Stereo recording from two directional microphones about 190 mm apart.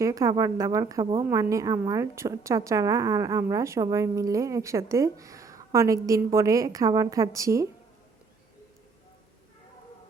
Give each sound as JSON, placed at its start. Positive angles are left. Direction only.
{"t": 0.0, "sound": "speech", "side_deg": -15}